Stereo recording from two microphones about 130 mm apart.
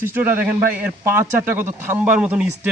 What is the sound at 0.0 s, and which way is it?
Speech, 15° right (ahead or behind).